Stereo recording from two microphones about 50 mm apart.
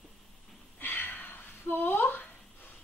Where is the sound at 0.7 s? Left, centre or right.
Left.